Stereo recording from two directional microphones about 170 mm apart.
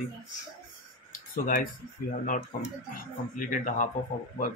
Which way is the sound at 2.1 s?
55° left (ahead or behind).